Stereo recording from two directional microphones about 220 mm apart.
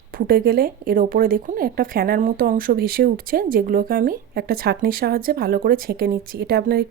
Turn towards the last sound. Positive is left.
turn(degrees=-45)  # may be behind; listen again after turning